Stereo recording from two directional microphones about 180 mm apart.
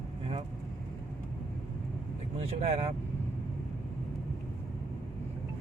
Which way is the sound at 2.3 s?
35° right (ahead or behind).